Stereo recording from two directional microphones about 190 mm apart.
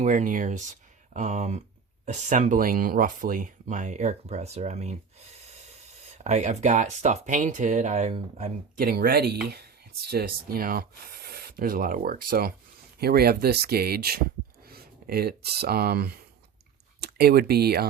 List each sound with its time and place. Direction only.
0.0 s speech: 40° right (ahead or behind)
6.1 s speech: 35° right (ahead or behind); by 17.8 s 55° right (ahead or behind)